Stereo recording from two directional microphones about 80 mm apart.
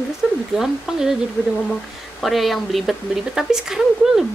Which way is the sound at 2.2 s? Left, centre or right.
Centre.